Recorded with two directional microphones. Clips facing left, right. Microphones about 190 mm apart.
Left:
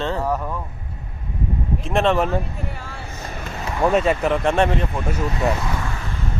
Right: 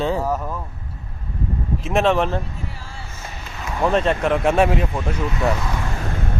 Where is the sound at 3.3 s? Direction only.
55° left (ahead or behind).